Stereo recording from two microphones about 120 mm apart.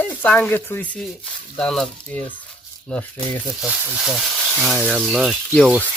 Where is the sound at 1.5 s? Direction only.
5° left (ahead or behind).